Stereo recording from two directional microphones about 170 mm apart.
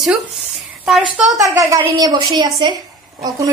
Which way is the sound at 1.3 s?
20° right (ahead or behind).